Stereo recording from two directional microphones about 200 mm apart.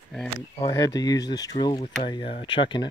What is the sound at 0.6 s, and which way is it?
Speech, 15° left (ahead or behind).